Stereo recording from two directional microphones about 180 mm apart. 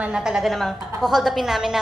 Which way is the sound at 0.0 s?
5° right (ahead or behind).